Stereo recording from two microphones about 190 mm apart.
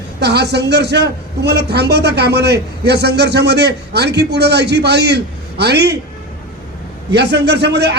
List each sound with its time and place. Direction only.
0.2 s a man's voice: 60° right (ahead or behind)
7.1 s a man's voice: 60° right (ahead or behind)